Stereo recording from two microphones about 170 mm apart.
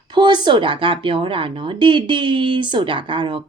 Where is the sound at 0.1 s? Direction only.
25° right (ahead or behind).